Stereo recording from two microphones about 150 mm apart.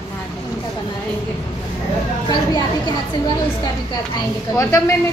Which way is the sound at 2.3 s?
25° left (ahead or behind).